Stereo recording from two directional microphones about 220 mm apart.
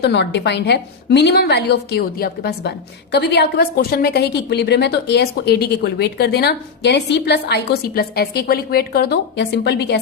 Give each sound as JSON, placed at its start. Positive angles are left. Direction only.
{"t": 0.0, "sound": "a woman's voice", "side_deg": 50}